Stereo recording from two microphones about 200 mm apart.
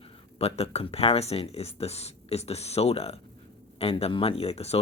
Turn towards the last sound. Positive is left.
turn(degrees=30)  # may be behind; listen again after turning